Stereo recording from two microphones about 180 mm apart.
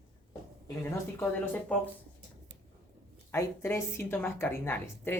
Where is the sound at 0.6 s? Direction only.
15° left (ahead or behind).